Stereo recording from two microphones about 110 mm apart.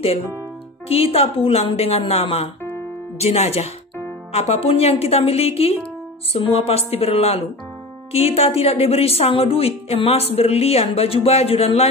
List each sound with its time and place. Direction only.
0.8 s a woman's voice: 65° left (ahead or behind)